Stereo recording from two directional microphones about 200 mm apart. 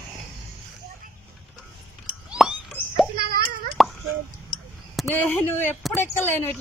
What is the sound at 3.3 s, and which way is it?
Plop, 45° right (ahead or behind).